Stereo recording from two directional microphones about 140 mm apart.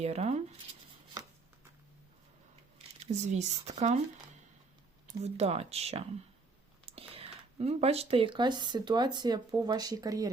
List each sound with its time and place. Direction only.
0.0 s a sound: 50° right (ahead or behind)
2.7 s speech: 55° right (ahead or behind)
5.2 s speech: 45° right (ahead or behind); by 10.2 s 25° right (ahead or behind)